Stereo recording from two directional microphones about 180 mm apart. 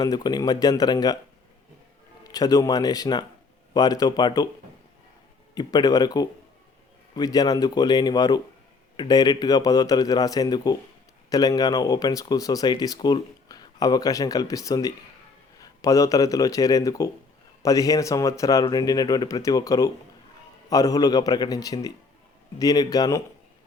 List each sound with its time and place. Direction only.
0.0 s speech: 20° left (ahead or behind)
2.2 s speech: 20° left (ahead or behind)
5.5 s speech: 20° left (ahead or behind)